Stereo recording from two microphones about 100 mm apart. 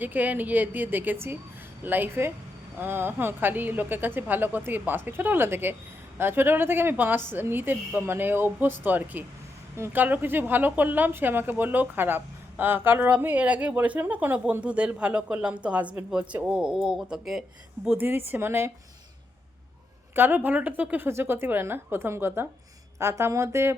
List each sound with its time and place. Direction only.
0.0 s a woman's voice: 20° right (ahead or behind)
17.8 s a woman's voice: 20° right (ahead or behind)
20.1 s a woman's voice: 20° right (ahead or behind)